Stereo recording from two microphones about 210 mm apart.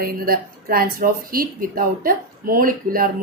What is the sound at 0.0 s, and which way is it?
A woman's voice, 45° right (ahead or behind).